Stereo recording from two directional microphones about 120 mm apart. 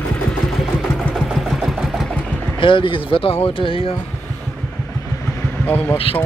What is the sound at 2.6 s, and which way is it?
Speech, 45° left (ahead or behind).